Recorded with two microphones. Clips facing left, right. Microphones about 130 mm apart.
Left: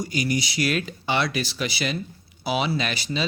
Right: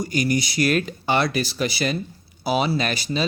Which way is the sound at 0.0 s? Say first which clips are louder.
Right 3 dB; 45° right (ahead or behind).